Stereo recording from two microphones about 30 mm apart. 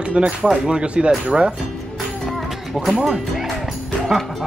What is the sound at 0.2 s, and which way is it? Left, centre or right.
Speech, right.